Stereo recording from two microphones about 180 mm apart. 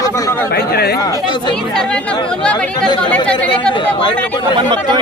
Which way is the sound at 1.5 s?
5° left (ahead or behind).